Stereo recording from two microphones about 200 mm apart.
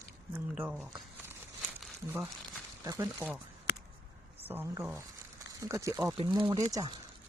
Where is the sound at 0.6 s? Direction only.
5° right (ahead or behind).